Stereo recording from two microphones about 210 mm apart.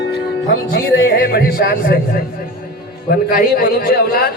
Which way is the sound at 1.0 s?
45° left (ahead or behind).